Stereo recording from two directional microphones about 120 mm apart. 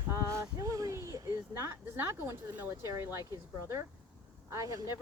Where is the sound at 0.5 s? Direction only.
25° right (ahead or behind).